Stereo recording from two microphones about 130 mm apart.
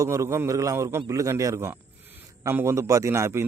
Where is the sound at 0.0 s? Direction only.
20° right (ahead or behind).